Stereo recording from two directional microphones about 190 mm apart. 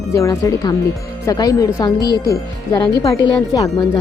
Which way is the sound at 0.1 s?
15° left (ahead or behind).